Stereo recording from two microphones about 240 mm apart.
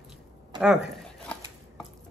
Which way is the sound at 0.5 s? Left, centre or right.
Centre.